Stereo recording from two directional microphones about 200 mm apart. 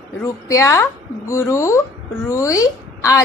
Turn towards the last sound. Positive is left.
turn(degrees=15)  # may be behind; listen again after turning